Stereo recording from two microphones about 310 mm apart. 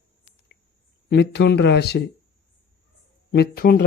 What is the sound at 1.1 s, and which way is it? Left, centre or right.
Speech, left.